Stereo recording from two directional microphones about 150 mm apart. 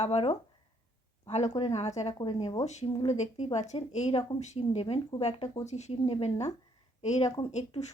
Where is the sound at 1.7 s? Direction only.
50° left (ahead or behind).